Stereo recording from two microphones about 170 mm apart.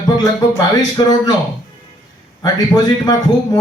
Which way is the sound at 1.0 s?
25° left (ahead or behind).